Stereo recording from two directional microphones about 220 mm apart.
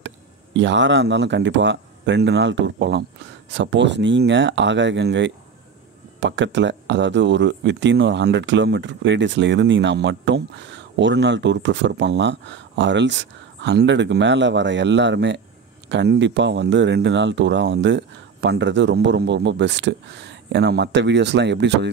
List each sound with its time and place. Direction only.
0.0 s speech: 55° right (ahead or behind)